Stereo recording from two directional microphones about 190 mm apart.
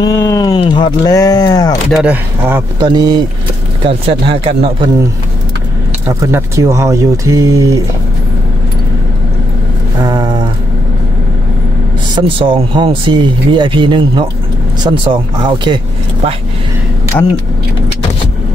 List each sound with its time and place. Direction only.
0.0 s speech: 15° left (ahead or behind)
1.9 s speech: 5° right (ahead or behind)
2.8 s speech: 20° right (ahead or behind)
6.2 s speech: 15° right (ahead or behind)
10.0 s a sound: 20° right (ahead or behind)
12.2 s speech: 25° right (ahead or behind)